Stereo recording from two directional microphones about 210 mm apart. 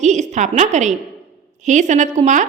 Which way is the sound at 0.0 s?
35° right (ahead or behind).